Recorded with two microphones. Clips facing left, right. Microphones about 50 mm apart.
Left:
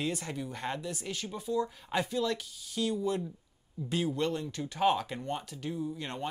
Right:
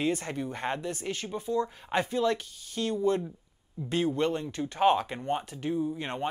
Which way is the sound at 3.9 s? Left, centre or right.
Right.